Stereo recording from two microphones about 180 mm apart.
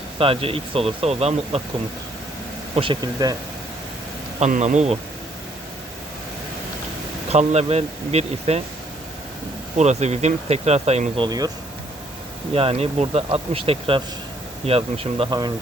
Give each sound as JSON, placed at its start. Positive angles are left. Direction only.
{"t": 0.2, "sound": "speech", "side_deg": -30}
{"t": 2.7, "sound": "speech", "side_deg": -30}
{"t": 4.4, "sound": "speech", "side_deg": -40}
{"t": 7.3, "sound": "speech", "side_deg": -35}
{"t": 9.7, "sound": "speech", "side_deg": -40}
{"t": 11.3, "sound": "speech", "side_deg": -20}
{"t": 12.5, "sound": "speech", "side_deg": -35}